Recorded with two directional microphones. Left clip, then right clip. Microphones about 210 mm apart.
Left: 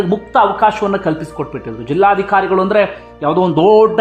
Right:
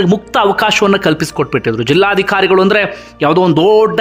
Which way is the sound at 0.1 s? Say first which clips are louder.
Right 1 dB; 20° right (ahead or behind).